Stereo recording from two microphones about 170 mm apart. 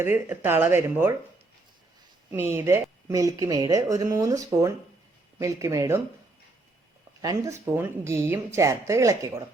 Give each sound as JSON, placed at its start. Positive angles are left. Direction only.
{"t": 0.0, "sound": "speech", "side_deg": -10}
{"t": 2.3, "sound": "speech", "side_deg": -15}
{"t": 7.2, "sound": "speech", "side_deg": -20}